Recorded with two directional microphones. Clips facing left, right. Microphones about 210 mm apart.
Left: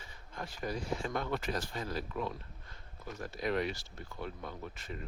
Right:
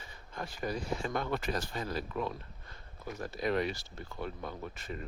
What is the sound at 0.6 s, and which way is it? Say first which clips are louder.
Speech: right 1 dB; 55° right (ahead or behind).